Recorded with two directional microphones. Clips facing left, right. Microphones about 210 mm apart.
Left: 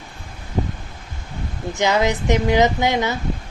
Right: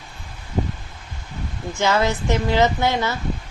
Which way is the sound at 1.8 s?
15° left (ahead or behind).